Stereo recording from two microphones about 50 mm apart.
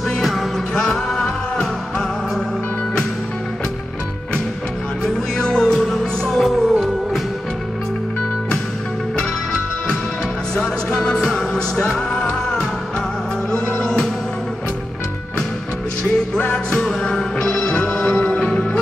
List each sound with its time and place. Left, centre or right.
1.1 s music: centre
5.0 s music: centre
5.8 s music: centre
10.9 s music: centre
16.3 s music: centre